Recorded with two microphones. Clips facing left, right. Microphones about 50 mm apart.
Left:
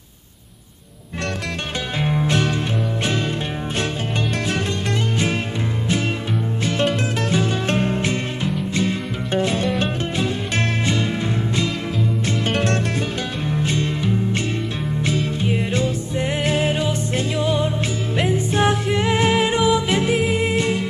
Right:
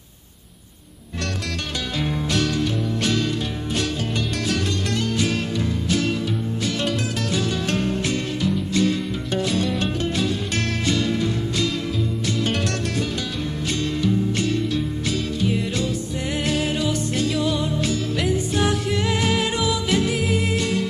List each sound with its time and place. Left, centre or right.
2.0 s music: left
5.1 s music: left
6.6 s music: left